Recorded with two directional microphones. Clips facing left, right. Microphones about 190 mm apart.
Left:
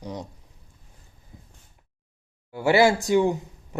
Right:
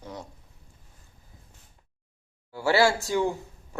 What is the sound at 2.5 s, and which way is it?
Speech, 20° left (ahead or behind).